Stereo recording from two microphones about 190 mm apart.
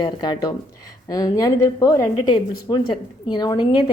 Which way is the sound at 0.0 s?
25° left (ahead or behind).